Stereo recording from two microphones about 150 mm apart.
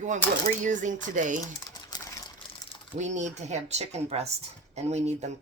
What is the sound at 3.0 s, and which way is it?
Speech, 50° right (ahead or behind).